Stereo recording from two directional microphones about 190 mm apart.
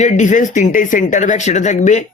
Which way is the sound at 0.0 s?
40° left (ahead or behind).